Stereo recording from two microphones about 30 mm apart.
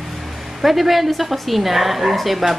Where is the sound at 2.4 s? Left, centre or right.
Right.